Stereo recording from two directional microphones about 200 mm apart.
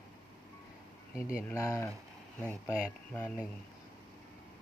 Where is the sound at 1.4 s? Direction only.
15° left (ahead or behind).